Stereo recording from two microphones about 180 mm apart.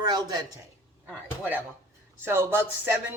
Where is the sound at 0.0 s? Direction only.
20° right (ahead or behind).